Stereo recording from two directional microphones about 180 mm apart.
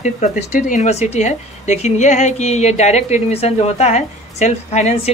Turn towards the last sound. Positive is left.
turn(degrees=40)  # may be behind; listen again after turning